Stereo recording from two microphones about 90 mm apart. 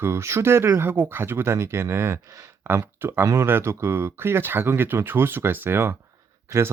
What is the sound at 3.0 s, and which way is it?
Speech, 25° right (ahead or behind).